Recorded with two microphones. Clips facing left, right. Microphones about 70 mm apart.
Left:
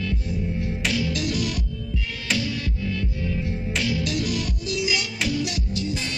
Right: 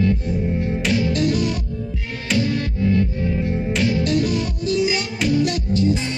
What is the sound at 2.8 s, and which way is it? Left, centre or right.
Music, right.